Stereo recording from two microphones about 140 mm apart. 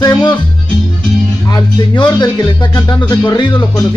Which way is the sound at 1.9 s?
30° left (ahead or behind).